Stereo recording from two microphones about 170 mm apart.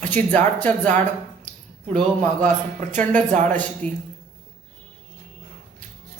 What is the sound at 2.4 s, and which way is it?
A man's voice, 45° right (ahead or behind).